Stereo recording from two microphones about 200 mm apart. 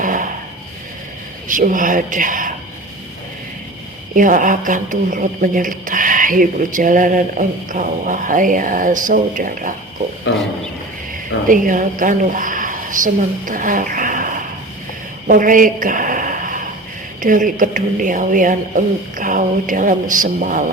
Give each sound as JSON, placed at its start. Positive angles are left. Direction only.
{"t": 0.0, "sound": "a sound", "side_deg": -40}
{"t": 1.5, "sound": "speech", "side_deg": -40}
{"t": 4.1, "sound": "speech", "side_deg": -40}
{"t": 10.3, "sound": "a man's voice", "side_deg": 65}
{"t": 11.4, "sound": "a woman's voice", "side_deg": -40}
{"t": 15.3, "sound": "a sound", "side_deg": -40}
{"t": 17.2, "sound": "speech", "side_deg": -40}